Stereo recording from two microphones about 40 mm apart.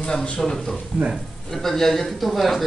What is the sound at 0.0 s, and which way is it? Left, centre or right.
Speech, left.